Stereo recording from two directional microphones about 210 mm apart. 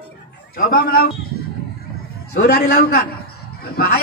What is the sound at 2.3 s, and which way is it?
Speech, 50° left (ahead or behind).